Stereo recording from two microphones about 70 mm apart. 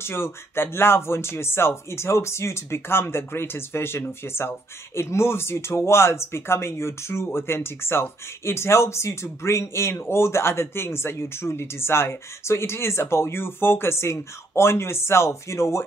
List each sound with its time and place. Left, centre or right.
0.0 s speech: left